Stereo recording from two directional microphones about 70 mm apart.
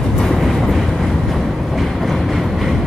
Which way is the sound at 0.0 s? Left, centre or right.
Centre.